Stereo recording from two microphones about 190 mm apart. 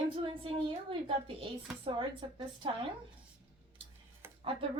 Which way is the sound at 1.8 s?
25° right (ahead or behind).